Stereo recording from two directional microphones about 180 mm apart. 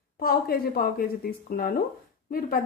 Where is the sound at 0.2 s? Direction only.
55° left (ahead or behind).